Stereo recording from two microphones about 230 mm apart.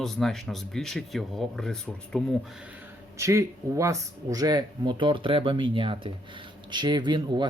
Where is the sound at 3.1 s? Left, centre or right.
Centre.